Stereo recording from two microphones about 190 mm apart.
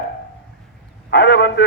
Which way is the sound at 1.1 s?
60° left (ahead or behind).